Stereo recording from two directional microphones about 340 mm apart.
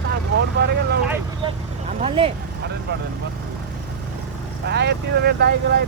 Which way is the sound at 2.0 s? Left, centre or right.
Centre.